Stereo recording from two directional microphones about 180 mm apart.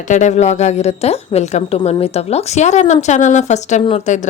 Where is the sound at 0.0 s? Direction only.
40° left (ahead or behind).